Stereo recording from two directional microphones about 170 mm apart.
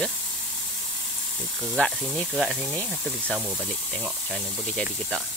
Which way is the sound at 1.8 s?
5° left (ahead or behind).